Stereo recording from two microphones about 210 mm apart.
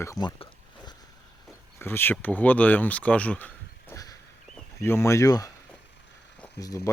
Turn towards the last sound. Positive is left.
turn(degrees=15)  # may be behind; listen again after turning